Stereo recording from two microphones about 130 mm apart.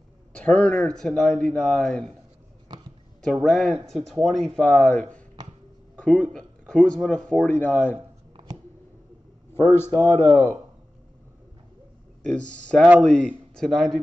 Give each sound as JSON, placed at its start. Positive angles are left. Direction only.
{"t": 0.3, "sound": "speech", "side_deg": 10}
{"t": 3.2, "sound": "speech", "side_deg": 0}
{"t": 5.9, "sound": "a sound", "side_deg": 10}
{"t": 6.7, "sound": "speech", "side_deg": 5}
{"t": 9.5, "sound": "speech", "side_deg": 20}
{"t": 12.3, "sound": "speech", "side_deg": 10}